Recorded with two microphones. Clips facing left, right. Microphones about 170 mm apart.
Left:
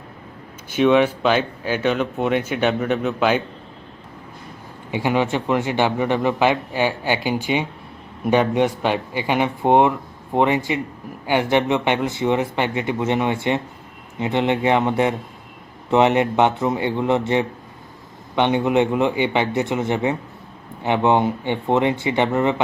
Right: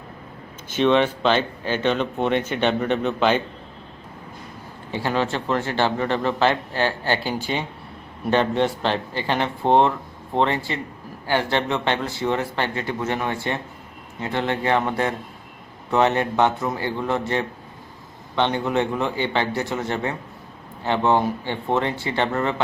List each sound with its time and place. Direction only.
0.7 s speech: 10° left (ahead or behind)
4.9 s speech: 15° left (ahead or behind)